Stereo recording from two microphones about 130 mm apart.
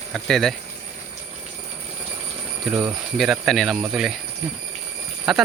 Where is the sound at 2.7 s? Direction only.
15° right (ahead or behind).